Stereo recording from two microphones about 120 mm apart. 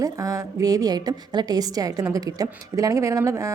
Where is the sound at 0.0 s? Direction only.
30° right (ahead or behind).